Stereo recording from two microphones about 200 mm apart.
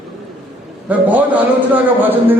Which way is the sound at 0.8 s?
10° right (ahead or behind).